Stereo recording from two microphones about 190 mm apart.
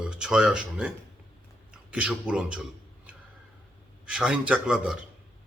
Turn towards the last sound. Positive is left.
turn(degrees=-5)  # may be behind; listen again after turning